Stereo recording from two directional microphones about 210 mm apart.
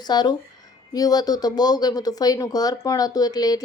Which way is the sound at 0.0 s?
20° left (ahead or behind).